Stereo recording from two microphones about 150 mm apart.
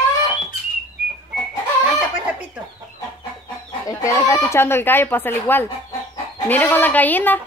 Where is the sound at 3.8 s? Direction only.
20° left (ahead or behind).